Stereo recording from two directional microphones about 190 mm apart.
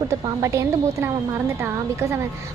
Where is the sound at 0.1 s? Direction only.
15° right (ahead or behind).